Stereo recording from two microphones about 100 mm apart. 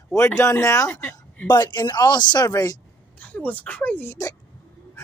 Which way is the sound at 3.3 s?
15° left (ahead or behind).